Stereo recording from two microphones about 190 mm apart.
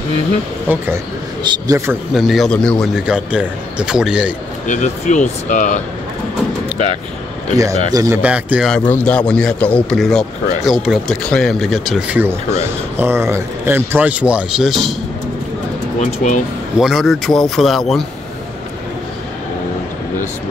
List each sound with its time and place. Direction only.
0.7 s speech: 10° right (ahead or behind)
1.4 s a man's voice: 25° right (ahead or behind)
1.9 s speech: centre (ahead or behind)
4.6 s speech: 40° left (ahead or behind)
7.5 s speech: 15° right (ahead or behind)
8.2 s speech: 5° right (ahead or behind)
16.0 s speech: 40° left (ahead or behind)
16.7 s speech: centre (ahead or behind)